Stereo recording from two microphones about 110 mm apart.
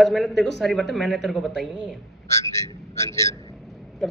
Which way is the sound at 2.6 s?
25° left (ahead or behind).